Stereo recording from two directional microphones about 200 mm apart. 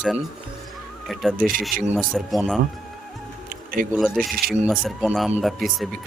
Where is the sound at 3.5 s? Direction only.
45° right (ahead or behind).